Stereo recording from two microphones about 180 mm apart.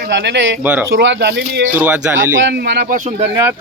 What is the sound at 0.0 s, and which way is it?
Speech, 70° right (ahead or behind).